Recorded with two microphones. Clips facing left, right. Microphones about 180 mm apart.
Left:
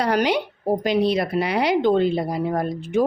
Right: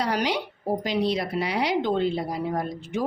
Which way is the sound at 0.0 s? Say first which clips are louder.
Left 5 dB; 55° left (ahead or behind).